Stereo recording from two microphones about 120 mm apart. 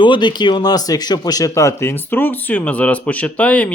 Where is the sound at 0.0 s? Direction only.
40° left (ahead or behind).